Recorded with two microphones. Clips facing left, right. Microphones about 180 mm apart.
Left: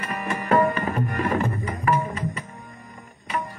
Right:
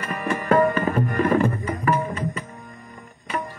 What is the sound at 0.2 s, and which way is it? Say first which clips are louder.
Tabla: right 2 dB; 40° right (ahead or behind).